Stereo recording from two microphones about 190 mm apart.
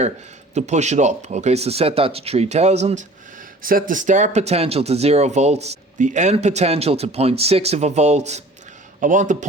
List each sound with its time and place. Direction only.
0.5 s speech: 35° right (ahead or behind)